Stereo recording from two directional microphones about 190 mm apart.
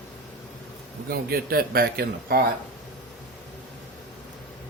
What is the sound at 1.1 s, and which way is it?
A man's voice, 55° right (ahead or behind).